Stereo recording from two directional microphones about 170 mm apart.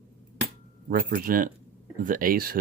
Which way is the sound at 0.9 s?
55° right (ahead or behind).